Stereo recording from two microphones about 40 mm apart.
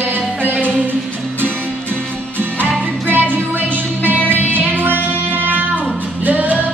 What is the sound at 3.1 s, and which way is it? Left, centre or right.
Music, right.